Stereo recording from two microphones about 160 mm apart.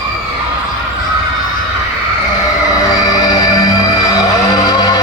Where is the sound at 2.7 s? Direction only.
20° left (ahead or behind).